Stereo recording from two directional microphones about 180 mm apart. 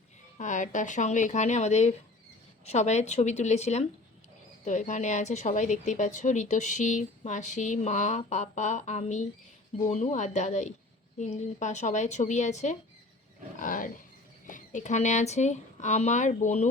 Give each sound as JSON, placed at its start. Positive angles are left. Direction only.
{"t": 0.3, "sound": "a woman's voice", "side_deg": 45}
{"t": 13.6, "sound": "roaring cats", "side_deg": 50}
{"t": 14.4, "sound": "speech", "side_deg": 45}